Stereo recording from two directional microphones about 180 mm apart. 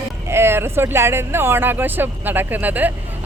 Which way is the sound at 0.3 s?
15° right (ahead or behind).